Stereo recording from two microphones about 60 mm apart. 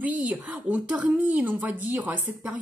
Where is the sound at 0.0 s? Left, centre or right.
Right.